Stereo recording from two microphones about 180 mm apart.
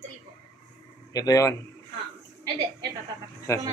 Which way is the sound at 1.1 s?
20° left (ahead or behind).